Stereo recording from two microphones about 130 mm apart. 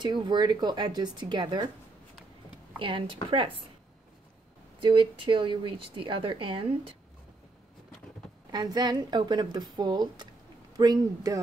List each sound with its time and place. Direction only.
0.0 s a woman's voice: 35° right (ahead or behind)
2.8 s a woman's voice: 40° right (ahead or behind)
4.8 s a woman's voice: 40° right (ahead or behind)
8.5 s a woman's voice: 30° right (ahead or behind)